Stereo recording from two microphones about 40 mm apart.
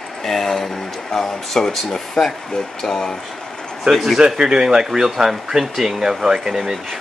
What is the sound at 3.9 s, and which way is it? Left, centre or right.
Speech, centre.